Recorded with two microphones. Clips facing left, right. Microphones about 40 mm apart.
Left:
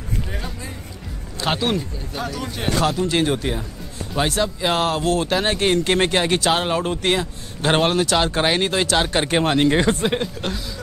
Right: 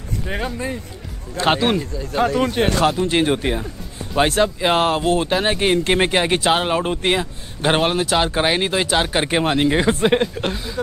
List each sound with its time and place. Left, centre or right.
0.3 s speech: right
1.5 s speech: centre
2.1 s speech: right
2.8 s speech: right
4.6 s speech: right
5.3 s speech: centre
7.7 s speech: centre
10.0 s speech: centre